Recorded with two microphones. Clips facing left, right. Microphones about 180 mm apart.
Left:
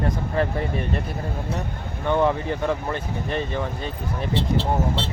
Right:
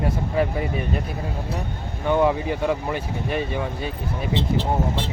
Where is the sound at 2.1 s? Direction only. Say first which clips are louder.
Right 1 dB; 10° right (ahead or behind).